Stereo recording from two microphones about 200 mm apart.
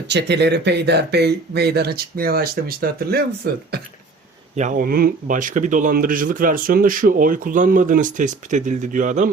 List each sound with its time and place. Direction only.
0.1 s speech: 60° right (ahead or behind)
4.5 s speech: 40° right (ahead or behind)